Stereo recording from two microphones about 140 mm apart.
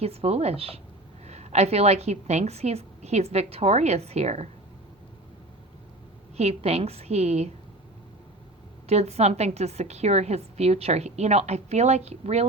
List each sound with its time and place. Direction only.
0.0 s a woman's voice: 45° right (ahead or behind)
6.3 s a woman's voice: 45° right (ahead or behind)
8.9 s a woman's voice: 50° right (ahead or behind)